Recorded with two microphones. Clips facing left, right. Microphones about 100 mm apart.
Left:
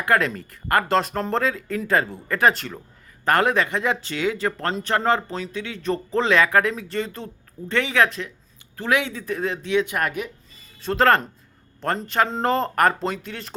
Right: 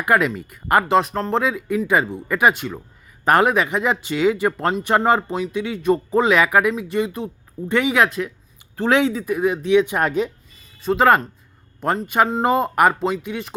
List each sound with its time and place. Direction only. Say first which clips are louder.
0.1 s speech: right 3 dB; 10° right (ahead or behind)
10.8 s speech: right 3 dB; 5° right (ahead or behind)